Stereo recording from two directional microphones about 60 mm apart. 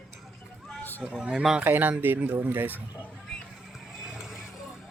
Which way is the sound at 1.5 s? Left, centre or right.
Right.